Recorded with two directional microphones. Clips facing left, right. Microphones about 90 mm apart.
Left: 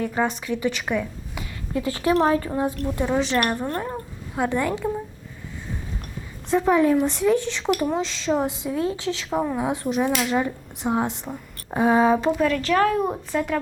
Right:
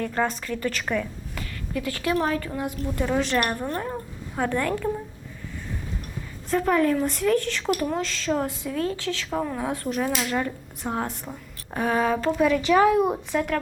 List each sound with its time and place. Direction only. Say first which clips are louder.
0.0 s a woman's voice: left 2 dB; 5° left (ahead or behind)
1.7 s speech: left 4 dB; 25° left (ahead or behind)
2.8 s a woman's voice: left 2 dB; 15° left (ahead or behind)
6.5 s a woman's voice: left 3 dB; 15° left (ahead or behind)
9.0 s speech: left 2 dB; 30° left (ahead or behind)
9.3 s a woman's voice: left 4 dB; 15° left (ahead or behind)
12.4 s speech: right 1 dB; 10° right (ahead or behind)